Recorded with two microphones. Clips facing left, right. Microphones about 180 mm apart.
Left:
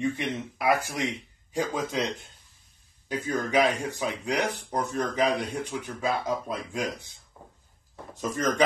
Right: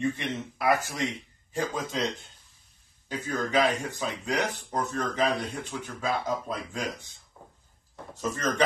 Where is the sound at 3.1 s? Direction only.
15° left (ahead or behind).